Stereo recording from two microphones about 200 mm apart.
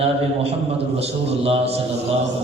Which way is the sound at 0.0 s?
30° right (ahead or behind).